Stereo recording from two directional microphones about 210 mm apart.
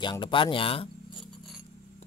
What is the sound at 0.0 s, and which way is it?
Speech, 20° left (ahead or behind).